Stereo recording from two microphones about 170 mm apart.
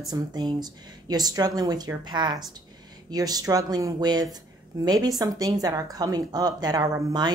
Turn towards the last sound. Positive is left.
turn(degrees=-25)  # may be behind; listen again after turning